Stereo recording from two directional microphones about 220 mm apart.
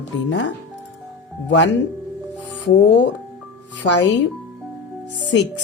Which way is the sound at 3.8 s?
55° left (ahead or behind).